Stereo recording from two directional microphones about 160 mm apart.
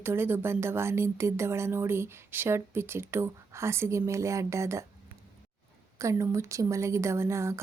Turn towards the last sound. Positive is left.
turn(degrees=-15)  # may be behind; listen again after turning